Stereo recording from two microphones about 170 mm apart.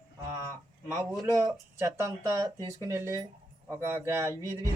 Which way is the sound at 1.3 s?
20° right (ahead or behind).